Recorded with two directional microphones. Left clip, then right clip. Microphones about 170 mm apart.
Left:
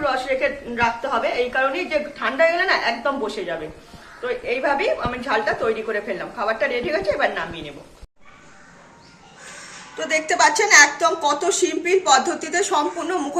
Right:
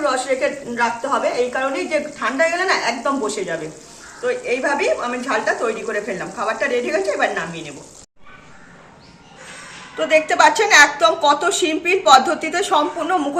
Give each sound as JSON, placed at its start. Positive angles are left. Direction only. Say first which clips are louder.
{"t": 0.0, "sound": "a woman's voice", "louder": "right 2 dB", "side_deg": 40}
{"t": 10.0, "sound": "a woman's voice", "louder": "right 4 dB", "side_deg": 10}